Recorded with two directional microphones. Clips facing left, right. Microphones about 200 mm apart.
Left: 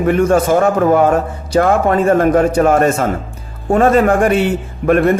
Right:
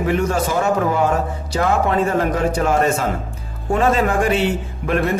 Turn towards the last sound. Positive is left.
turn(degrees=55)  # may be behind; listen again after turning